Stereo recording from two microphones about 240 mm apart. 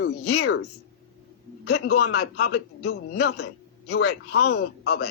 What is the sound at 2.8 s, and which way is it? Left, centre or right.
Speech, left.